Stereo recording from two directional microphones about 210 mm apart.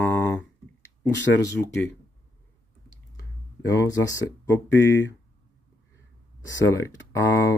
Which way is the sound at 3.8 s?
15° left (ahead or behind).